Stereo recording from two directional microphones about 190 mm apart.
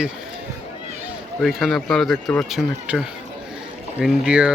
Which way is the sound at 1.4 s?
Centre (ahead or behind).